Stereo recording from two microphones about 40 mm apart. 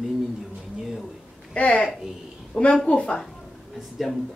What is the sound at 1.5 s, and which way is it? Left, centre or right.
Speech, left.